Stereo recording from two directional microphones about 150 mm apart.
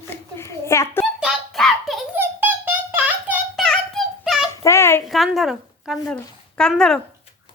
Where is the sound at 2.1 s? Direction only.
15° right (ahead or behind).